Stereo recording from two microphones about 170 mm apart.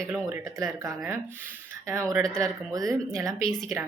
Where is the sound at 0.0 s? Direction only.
20° right (ahead or behind).